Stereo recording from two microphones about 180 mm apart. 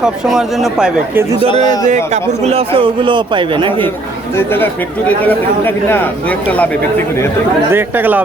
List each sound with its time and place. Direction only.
0.0 s speech: centre (ahead or behind)
1.6 s a man's voice: 20° left (ahead or behind)
2.1 s a man's voice: 35° right (ahead or behind)
4.4 s speech: 10° left (ahead or behind)
7.7 s speech: 10° right (ahead or behind)